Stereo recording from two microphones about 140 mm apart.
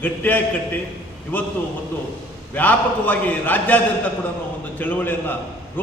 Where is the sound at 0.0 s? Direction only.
15° left (ahead or behind).